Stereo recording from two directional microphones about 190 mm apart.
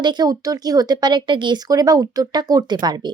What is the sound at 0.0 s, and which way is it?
A woman's voice, 20° right (ahead or behind).